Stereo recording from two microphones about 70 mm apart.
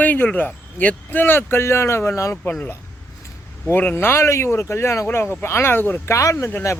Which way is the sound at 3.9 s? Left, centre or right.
Left.